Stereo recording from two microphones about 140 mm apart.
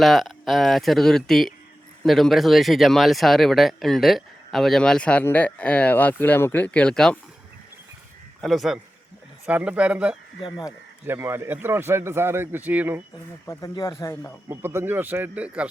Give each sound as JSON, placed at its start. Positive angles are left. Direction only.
{"t": 0.0, "sound": "speech", "side_deg": 0}
{"t": 8.4, "sound": "a man's voice", "side_deg": 0}
{"t": 13.5, "sound": "speech", "side_deg": 25}
{"t": 14.4, "sound": "a man's voice", "side_deg": -20}